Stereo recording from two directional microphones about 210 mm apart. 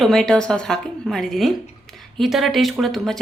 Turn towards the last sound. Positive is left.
turn(degrees=0)  # may be behind; listen again after turning